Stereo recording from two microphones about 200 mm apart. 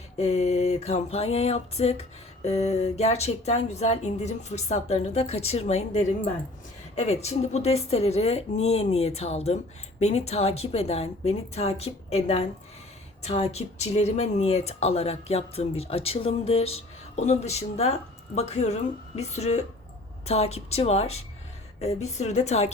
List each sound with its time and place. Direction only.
0.2 s speech: 30° left (ahead or behind)